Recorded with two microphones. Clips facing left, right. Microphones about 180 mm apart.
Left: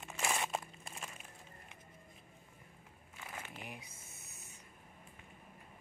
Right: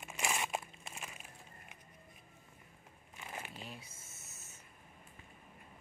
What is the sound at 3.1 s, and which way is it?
Crumpling, 15° right (ahead or behind).